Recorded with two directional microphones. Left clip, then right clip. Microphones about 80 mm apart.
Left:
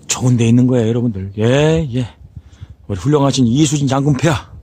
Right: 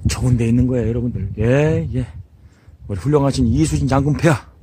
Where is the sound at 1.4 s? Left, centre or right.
Left.